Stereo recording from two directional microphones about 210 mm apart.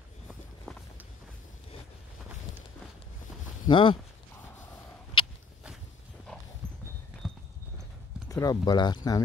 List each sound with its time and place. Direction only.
0.7 s walk: centre (ahead or behind)
3.6 s speech: 25° left (ahead or behind)
5.2 s a sound: 25° left (ahead or behind)
8.3 s speech: 15° left (ahead or behind)